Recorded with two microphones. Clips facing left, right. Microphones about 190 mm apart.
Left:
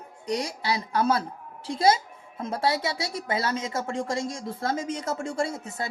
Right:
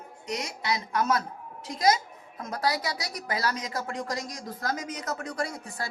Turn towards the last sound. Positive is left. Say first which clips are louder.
# left 4 dB
turn(degrees=25)  # may be behind; listen again after turning